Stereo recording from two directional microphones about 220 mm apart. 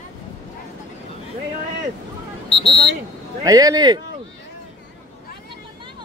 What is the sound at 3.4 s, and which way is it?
Speech, 15° right (ahead or behind).